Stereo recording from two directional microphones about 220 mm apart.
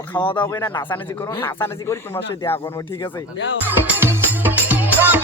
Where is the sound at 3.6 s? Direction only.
10° right (ahead or behind).